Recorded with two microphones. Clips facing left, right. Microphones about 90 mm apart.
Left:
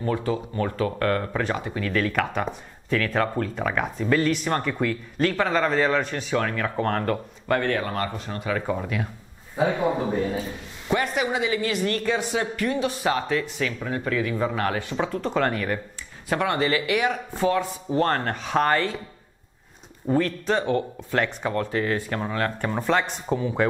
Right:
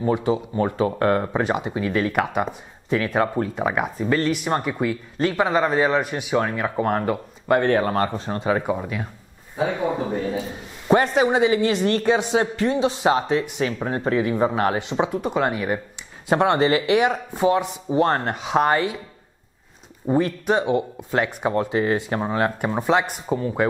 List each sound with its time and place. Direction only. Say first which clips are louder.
0.0 s speech: right 4 dB; 20° right (ahead or behind)
7.6 s speech: right 6 dB; 30° right (ahead or behind)
8.6 s speech: right 2 dB; 5° right (ahead or behind)
10.9 s speech: right 7 dB; 35° right (ahead or behind)
13.7 s speech: right 5 dB; 35° right (ahead or behind); by 15.8 s 15° right (ahead or behind)
16.3 s speech: right 5 dB; 30° right (ahead or behind)
20.1 s speech: right 3 dB; 15° right (ahead or behind)